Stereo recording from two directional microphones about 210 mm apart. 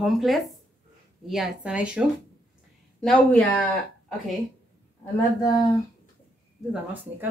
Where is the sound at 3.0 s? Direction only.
5° left (ahead or behind).